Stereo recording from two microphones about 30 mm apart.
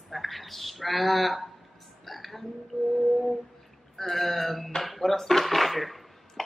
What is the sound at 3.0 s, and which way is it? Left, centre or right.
Speech, centre.